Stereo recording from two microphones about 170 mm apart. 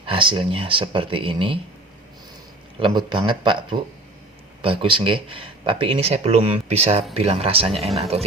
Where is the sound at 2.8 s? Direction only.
30° right (ahead or behind).